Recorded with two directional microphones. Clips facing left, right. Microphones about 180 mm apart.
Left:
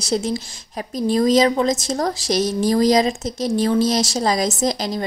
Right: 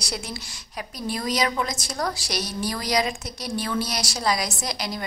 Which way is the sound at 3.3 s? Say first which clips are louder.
Left 10 dB; 90° left.